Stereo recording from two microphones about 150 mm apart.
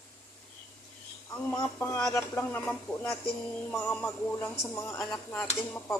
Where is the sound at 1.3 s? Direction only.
15° left (ahead or behind).